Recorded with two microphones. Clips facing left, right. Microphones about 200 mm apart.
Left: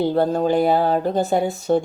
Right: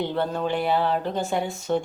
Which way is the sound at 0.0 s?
40° left (ahead or behind).